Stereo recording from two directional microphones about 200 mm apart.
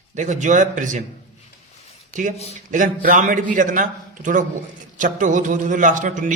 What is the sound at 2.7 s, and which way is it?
A man's voice, 40° right (ahead or behind).